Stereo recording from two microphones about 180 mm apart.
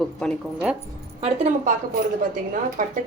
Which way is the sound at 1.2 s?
40° right (ahead or behind).